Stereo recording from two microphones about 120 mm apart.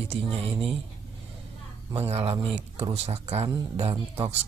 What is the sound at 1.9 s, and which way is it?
Speech, 60° right (ahead or behind).